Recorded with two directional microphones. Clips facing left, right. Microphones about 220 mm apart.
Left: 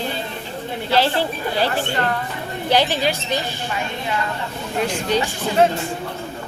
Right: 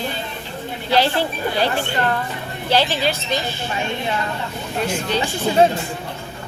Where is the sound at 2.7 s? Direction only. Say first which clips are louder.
Even; 15° left (ahead or behind).